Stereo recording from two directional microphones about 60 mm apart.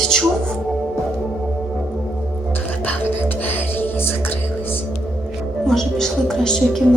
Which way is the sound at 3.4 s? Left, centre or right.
Left.